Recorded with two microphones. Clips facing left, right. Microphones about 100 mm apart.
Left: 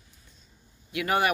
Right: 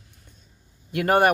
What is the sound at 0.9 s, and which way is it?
Speech, 50° right (ahead or behind).